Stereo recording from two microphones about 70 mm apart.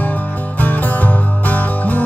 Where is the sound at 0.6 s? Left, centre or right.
Left.